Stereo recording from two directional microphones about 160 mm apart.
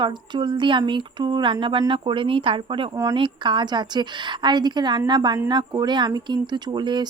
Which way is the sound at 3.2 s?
30° right (ahead or behind).